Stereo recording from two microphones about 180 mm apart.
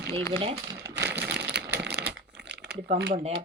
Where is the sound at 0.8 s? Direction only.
15° right (ahead or behind).